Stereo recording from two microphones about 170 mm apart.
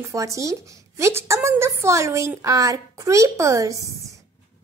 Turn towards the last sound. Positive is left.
turn(degrees=-20)  # may be behind; listen again after turning